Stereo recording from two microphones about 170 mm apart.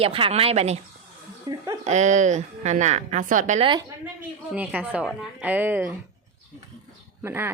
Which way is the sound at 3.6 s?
30° right (ahead or behind).